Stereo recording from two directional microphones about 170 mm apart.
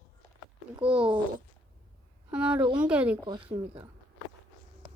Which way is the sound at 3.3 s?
30° right (ahead or behind).